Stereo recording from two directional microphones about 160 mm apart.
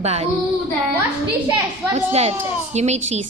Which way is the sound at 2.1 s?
40° right (ahead or behind).